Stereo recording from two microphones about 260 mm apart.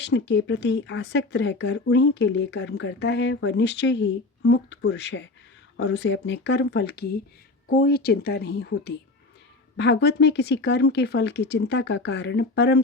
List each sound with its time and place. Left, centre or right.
0.0 s speech: left